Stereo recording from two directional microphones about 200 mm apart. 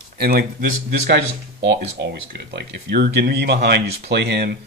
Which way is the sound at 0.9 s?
60° right (ahead or behind).